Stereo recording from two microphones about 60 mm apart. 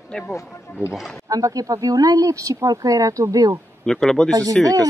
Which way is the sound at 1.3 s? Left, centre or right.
Right.